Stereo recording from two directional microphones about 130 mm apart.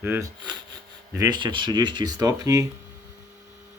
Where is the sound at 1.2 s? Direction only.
35° right (ahead or behind).